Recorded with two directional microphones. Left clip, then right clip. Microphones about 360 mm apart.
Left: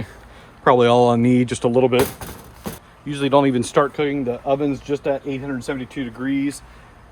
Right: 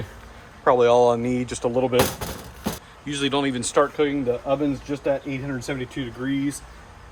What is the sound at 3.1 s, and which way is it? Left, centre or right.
Speech, centre.